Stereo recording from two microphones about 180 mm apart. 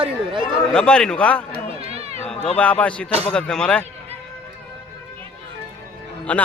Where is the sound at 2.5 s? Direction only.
5° left (ahead or behind).